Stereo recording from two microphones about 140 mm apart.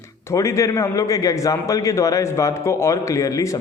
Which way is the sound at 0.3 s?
20° left (ahead or behind).